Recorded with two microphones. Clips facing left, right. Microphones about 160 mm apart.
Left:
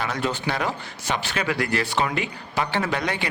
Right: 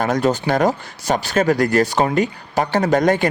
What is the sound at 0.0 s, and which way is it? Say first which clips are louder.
Speech: right 8 dB; 45° right (ahead or behind).